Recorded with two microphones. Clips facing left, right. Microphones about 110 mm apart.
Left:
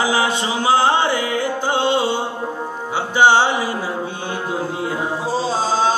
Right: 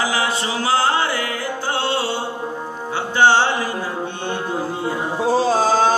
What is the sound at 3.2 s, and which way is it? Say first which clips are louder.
Music: left 1 dB; 15° left (ahead or behind).